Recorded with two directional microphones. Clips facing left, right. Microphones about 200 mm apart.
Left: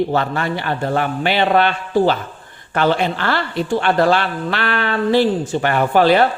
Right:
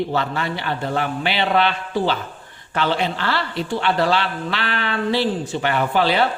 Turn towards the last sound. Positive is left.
turn(degrees=50)  # may be behind; listen again after turning